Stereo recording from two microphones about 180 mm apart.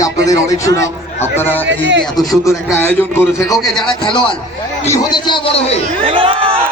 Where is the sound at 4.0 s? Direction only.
30° left (ahead or behind).